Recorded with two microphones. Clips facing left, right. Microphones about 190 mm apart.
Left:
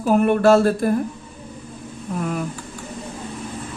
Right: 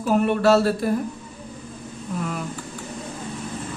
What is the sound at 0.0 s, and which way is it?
Speech, 50° left (ahead or behind).